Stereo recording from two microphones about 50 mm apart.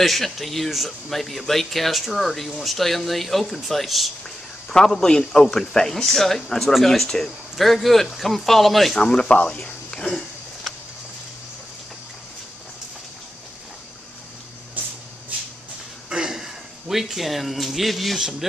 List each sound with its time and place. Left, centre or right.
0.0 s a man's voice: centre
4.6 s a man's voice: centre
9.0 s speech: centre
16.1 s a sound: centre